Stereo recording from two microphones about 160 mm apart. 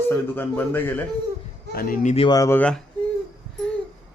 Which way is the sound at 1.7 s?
65° left (ahead or behind).